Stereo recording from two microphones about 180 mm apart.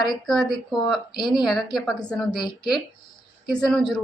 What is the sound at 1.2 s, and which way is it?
Speech, 25° left (ahead or behind).